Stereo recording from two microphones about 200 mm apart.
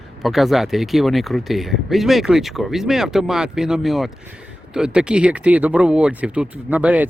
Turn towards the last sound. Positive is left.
turn(degrees=-5)  # may be behind; listen again after turning